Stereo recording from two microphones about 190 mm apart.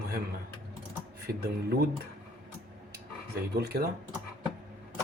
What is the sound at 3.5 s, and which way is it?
Speech, 60° right (ahead or behind).